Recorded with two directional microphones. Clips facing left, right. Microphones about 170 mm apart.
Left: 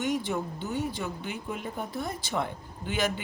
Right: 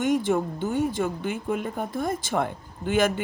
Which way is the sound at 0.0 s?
50° right (ahead or behind).